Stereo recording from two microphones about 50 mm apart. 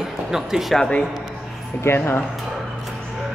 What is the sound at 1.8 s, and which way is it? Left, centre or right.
Speech, left.